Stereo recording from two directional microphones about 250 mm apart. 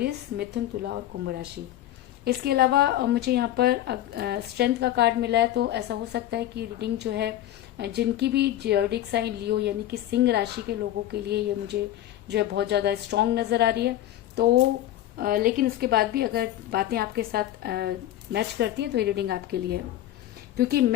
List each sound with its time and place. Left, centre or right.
0.0 s speech: right
15.2 s speech: right